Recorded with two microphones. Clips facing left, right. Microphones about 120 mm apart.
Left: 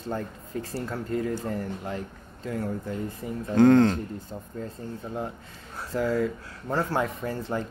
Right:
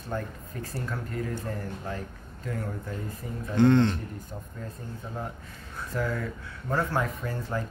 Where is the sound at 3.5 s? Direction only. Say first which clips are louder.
Left 3 dB; 45° left (ahead or behind).